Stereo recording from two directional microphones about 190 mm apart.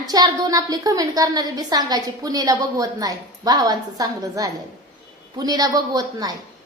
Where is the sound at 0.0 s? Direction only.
20° right (ahead or behind).